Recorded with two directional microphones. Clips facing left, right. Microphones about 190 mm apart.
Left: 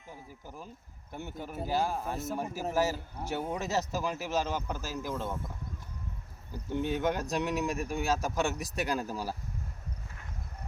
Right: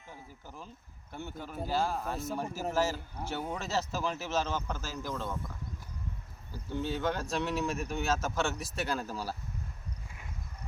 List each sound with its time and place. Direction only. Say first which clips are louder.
0.1 s speech: left 2 dB; 10° left (ahead or behind)
6.5 s speech: left 3 dB; 20° left (ahead or behind)